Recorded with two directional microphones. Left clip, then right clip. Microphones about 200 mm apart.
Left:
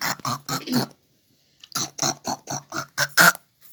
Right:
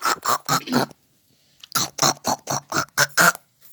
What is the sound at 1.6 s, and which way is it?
Chewing, 50° right (ahead or behind).